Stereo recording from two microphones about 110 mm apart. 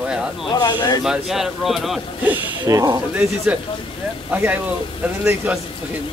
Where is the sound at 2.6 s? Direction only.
30° right (ahead or behind).